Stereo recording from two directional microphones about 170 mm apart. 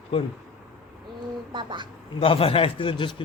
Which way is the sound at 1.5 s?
25° right (ahead or behind).